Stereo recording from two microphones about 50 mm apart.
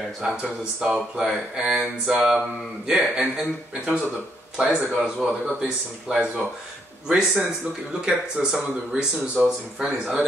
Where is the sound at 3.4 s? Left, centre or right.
Centre.